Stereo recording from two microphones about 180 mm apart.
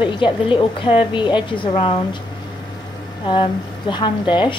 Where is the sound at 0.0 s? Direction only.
25° left (ahead or behind).